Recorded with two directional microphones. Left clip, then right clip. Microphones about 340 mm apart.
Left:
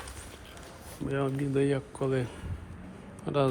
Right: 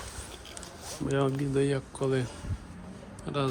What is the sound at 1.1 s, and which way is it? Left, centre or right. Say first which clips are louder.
Speech: right 2 dB; centre.